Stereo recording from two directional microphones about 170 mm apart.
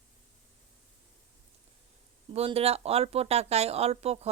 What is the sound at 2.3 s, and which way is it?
Speech, 35° right (ahead or behind).